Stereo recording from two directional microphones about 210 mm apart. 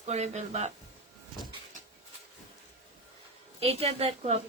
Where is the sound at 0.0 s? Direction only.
30° right (ahead or behind).